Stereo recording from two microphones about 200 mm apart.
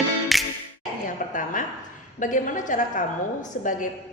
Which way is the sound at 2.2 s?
40° left (ahead or behind).